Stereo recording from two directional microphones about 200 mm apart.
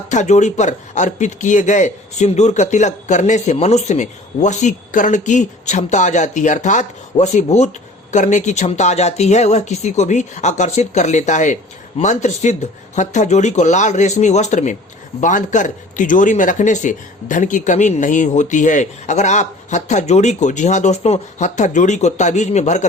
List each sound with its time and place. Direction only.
0.1 s speech: 35° left (ahead or behind)